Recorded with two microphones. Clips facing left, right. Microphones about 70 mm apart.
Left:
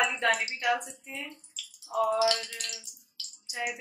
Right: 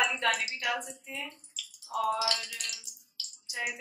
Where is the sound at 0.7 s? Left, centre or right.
Centre.